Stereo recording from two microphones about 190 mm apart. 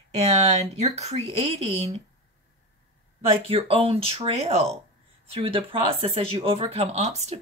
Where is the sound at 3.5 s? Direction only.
30° right (ahead or behind).